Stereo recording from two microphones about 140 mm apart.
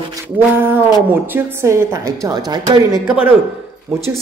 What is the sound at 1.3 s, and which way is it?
A woman's voice, 20° right (ahead or behind).